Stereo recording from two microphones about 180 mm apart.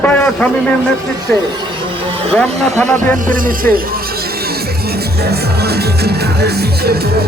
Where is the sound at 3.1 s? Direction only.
50° right (ahead or behind).